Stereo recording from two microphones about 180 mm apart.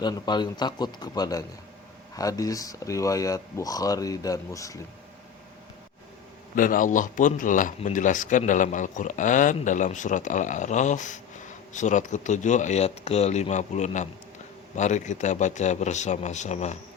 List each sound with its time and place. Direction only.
0.0 s speech: 25° left (ahead or behind)
6.6 s speech: 50° left (ahead or behind)